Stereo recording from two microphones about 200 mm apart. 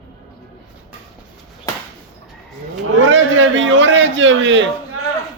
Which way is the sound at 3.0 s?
70° right (ahead or behind).